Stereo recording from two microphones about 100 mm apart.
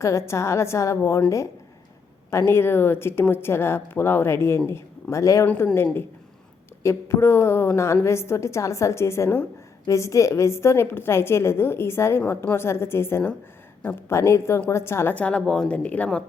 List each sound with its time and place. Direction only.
0.0 s a woman's voice: 30° left (ahead or behind)
2.5 s a woman's voice: 25° left (ahead or behind)
5.5 s a woman's voice: 20° left (ahead or behind)
15.1 s speech: 10° left (ahead or behind)